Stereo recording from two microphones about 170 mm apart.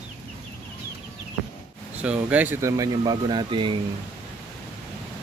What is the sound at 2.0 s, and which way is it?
Speech, 10° right (ahead or behind).